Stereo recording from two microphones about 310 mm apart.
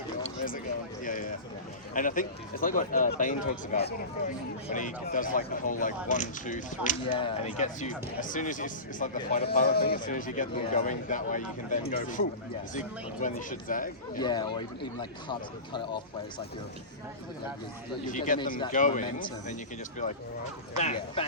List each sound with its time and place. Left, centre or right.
0.2 s a sound: left
1.0 s speech: left
13.2 s speech: left
14.2 s speech: centre
18.0 s speech: left
20.7 s speech: centre